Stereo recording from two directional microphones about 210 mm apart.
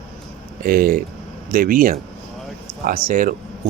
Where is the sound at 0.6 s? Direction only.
45° right (ahead or behind).